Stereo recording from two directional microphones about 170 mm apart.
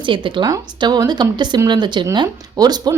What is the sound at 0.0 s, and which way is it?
Speech, 30° right (ahead or behind).